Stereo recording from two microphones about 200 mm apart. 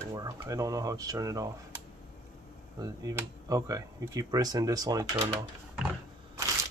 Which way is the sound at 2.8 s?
15° right (ahead or behind).